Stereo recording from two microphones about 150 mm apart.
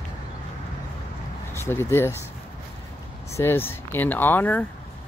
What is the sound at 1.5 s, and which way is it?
Speech, 15° left (ahead or behind).